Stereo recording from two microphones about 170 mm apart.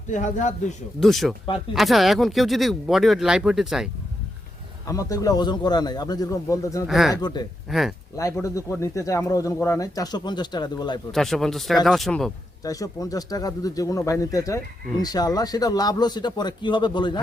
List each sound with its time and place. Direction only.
0.1 s a man's voice: 45° left (ahead or behind)
0.9 s speech: centre (ahead or behind)
4.9 s speech: 20° left (ahead or behind)
6.8 s speech: centre (ahead or behind)
7.1 s speech: 25° left (ahead or behind)
7.7 s speech: centre (ahead or behind)
8.1 s speech: 20° left (ahead or behind)
11.1 s speech: centre (ahead or behind)
12.6 s speech: 20° left (ahead or behind)